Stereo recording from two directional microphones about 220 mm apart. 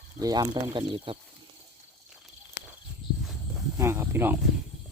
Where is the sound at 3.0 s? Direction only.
20° left (ahead or behind).